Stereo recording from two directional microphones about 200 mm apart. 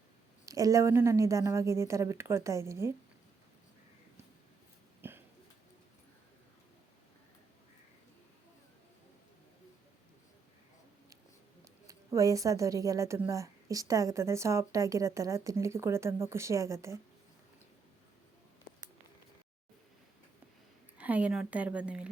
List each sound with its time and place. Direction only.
0.4 s a woman's voice: 15° right (ahead or behind)
5.0 s a sound: 10° right (ahead or behind)
11.6 s a woman's voice: 15° right (ahead or behind)
21.0 s a woman's voice: 5° right (ahead or behind)